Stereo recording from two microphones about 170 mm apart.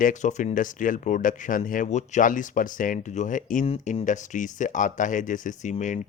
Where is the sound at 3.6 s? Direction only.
35° left (ahead or behind).